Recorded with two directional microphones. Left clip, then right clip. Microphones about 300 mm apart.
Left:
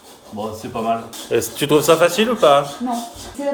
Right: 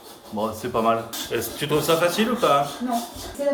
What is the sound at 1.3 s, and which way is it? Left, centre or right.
Speech, centre.